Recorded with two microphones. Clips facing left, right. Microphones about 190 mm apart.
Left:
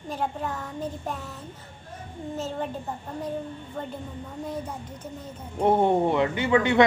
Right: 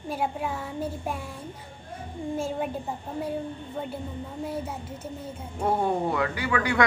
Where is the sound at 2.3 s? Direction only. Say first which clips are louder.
Right 1 dB; 10° right (ahead or behind).